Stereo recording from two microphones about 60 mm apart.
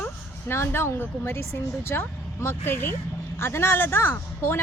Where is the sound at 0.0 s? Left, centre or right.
Left.